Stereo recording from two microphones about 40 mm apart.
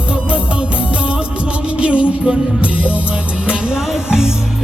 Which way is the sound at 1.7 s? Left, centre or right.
Right.